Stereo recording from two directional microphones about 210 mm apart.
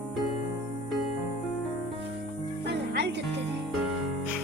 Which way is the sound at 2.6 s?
55° right (ahead or behind).